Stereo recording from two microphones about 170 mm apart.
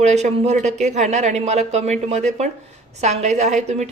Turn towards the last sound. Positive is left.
turn(degrees=-45)  # may be behind; listen again after turning